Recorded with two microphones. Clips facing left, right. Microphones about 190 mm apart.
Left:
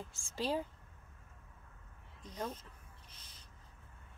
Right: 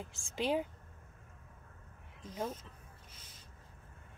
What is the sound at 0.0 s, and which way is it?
Speech, 15° right (ahead or behind).